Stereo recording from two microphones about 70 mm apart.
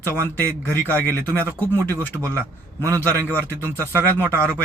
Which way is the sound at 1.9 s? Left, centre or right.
Right.